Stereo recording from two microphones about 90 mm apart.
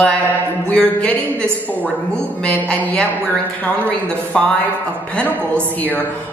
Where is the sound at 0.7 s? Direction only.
10° left (ahead or behind).